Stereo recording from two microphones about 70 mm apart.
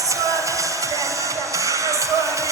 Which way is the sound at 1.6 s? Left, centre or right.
Right.